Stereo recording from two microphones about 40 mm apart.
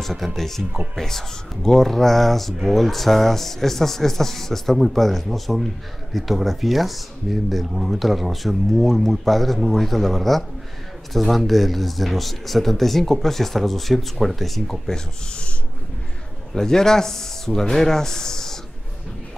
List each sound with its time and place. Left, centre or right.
0.0 s speech: centre
15.2 s speech: left
16.5 s speech: centre